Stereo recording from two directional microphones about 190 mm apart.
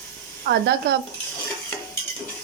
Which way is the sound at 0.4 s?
65° right (ahead or behind).